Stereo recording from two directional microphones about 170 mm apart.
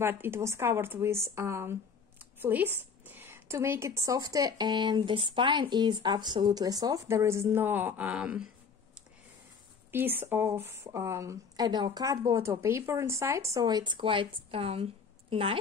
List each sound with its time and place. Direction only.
0.0 s a woman's voice: 15° right (ahead or behind)
9.8 s a woman's voice: 15° right (ahead or behind); by 15.5 s 35° right (ahead or behind)